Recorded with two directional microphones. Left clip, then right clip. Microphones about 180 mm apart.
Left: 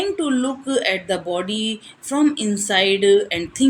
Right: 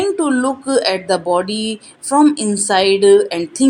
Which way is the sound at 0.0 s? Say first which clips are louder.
Right 5 dB; 15° right (ahead or behind).